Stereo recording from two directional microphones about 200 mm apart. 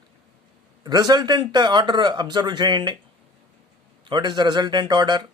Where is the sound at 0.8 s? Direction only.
20° right (ahead or behind).